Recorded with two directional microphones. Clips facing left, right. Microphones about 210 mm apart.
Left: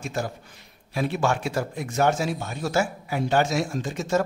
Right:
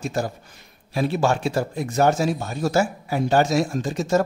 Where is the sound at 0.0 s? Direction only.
40° right (ahead or behind).